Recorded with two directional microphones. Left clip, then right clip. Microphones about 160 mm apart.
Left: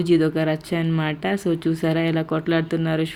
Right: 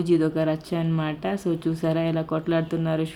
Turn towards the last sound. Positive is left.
turn(degrees=15)  # may be behind; listen again after turning